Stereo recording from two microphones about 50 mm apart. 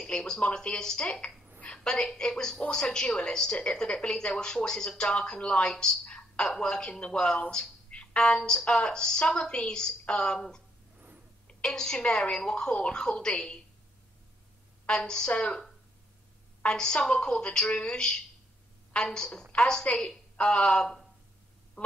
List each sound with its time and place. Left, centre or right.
0.4 s a woman's voice: centre
6.0 s a sound: centre
6.4 s a woman's voice: centre
11.6 s a woman's voice: centre
14.9 s a woman's voice: centre
21.8 s a sound: left